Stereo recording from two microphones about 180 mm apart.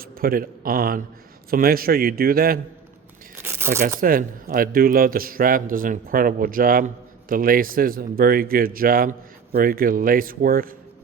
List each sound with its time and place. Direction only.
0.0 s a man's voice: 55° right (ahead or behind)
3.3 s tearing: 15° right (ahead or behind)
4.0 s speech: 50° right (ahead or behind)